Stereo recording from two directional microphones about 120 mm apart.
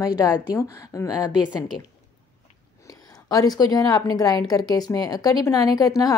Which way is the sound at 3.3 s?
30° left (ahead or behind).